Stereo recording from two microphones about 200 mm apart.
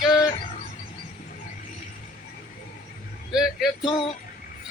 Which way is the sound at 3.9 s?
25° left (ahead or behind).